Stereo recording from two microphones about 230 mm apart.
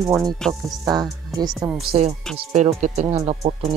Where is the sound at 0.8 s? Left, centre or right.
Centre.